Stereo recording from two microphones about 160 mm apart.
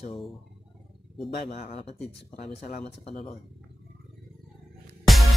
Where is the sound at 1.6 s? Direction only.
40° left (ahead or behind).